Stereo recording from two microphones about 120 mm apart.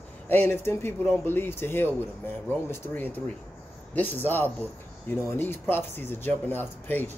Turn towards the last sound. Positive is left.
turn(degrees=15)  # may be behind; listen again after turning